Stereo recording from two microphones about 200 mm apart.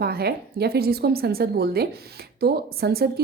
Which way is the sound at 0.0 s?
50° right (ahead or behind).